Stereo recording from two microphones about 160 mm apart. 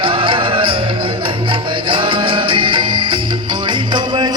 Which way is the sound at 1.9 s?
30° right (ahead or behind).